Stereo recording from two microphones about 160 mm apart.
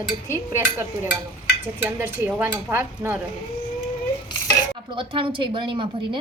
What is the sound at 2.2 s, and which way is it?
Speech, 10° right (ahead or behind).